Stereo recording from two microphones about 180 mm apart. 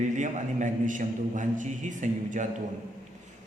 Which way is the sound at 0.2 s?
45° right (ahead or behind).